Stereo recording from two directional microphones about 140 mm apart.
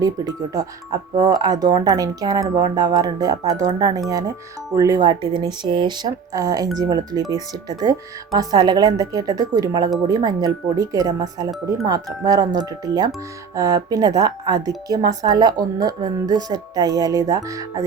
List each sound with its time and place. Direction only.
0.0 s speech: 25° right (ahead or behind)